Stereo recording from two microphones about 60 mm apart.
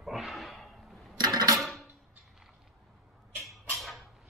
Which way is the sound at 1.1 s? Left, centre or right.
Right.